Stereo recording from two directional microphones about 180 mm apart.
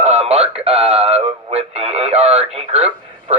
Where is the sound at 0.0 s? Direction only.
35° right (ahead or behind).